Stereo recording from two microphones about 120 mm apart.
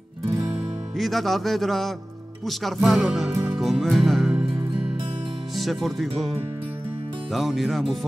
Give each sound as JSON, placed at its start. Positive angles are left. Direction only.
{"t": 0.9, "sound": "speech", "side_deg": 0}
{"t": 3.4, "sound": "music", "side_deg": -5}
{"t": 4.6, "sound": "music", "side_deg": -50}
{"t": 5.6, "sound": "speech", "side_deg": 0}
{"t": 7.3, "sound": "speech", "side_deg": 0}